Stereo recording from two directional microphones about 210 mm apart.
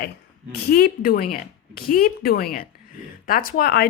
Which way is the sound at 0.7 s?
45° left (ahead or behind).